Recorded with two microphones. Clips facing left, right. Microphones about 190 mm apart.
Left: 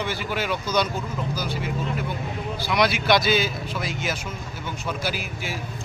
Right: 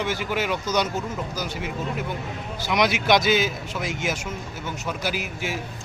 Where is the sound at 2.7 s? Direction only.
20° right (ahead or behind).